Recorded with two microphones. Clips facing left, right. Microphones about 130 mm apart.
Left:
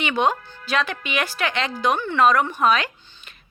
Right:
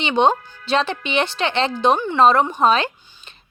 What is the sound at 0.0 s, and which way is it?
A woman's voice, 25° right (ahead or behind).